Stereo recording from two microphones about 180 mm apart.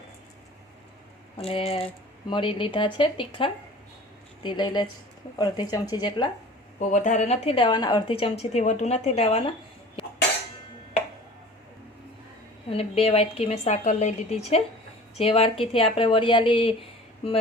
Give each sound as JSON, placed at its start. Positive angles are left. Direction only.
{"t": 1.4, "sound": "a woman's voice", "side_deg": 35}
{"t": 6.7, "sound": "a woman's voice", "side_deg": 40}
{"t": 12.7, "sound": "a woman's voice", "side_deg": 35}